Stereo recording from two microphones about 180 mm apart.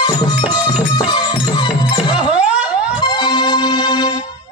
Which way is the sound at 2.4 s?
5° right (ahead or behind).